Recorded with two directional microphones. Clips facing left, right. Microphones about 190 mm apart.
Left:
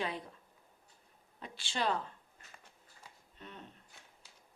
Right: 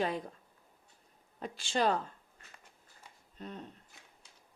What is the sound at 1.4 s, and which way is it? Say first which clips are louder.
Speech: right 6 dB; 45° right (ahead or behind).